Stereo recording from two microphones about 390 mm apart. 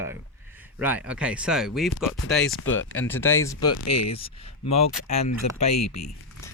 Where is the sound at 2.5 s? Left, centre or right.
Left.